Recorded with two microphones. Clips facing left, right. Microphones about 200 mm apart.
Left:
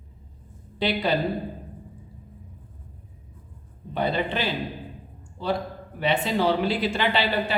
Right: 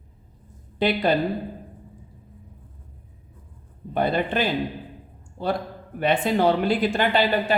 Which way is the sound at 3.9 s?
50° right (ahead or behind).